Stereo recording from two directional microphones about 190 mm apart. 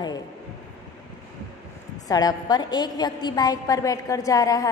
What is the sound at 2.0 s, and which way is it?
A woman's voice, 20° left (ahead or behind).